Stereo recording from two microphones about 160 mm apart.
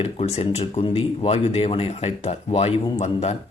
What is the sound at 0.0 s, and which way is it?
Speech, 40° left (ahead or behind).